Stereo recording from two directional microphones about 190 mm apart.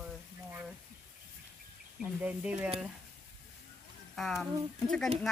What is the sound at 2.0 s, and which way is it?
Speech, 5° right (ahead or behind).